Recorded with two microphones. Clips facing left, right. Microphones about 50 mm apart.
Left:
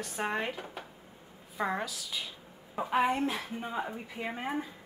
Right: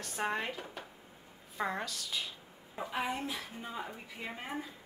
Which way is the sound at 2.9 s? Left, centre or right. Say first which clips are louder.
Left 8 dB; left.